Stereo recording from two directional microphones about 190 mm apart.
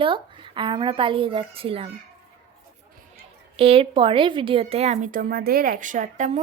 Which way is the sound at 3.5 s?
30° right (ahead or behind).